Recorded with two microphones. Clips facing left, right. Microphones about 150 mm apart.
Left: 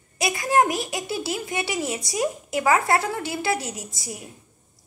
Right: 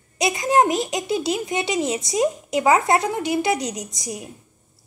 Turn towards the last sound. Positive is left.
turn(degrees=-20)  # may be behind; listen again after turning